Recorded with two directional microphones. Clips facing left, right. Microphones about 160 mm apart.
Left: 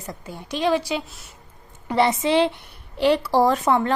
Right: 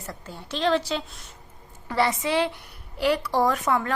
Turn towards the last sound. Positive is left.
turn(degrees=30)  # may be behind; listen again after turning